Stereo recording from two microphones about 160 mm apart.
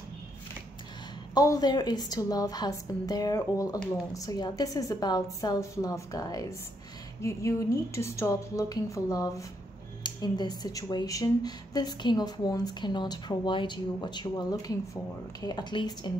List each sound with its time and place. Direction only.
1.3 s speech: 25° left (ahead or behind)